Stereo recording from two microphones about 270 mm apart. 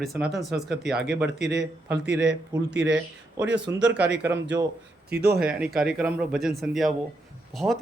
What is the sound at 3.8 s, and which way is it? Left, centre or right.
Speech, right.